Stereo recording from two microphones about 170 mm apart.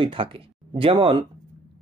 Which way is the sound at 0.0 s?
30° right (ahead or behind).